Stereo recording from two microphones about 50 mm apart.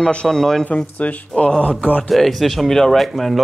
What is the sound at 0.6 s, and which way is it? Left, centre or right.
Speech, left.